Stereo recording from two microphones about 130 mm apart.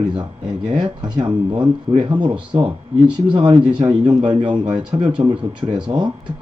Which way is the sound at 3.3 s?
40° right (ahead or behind).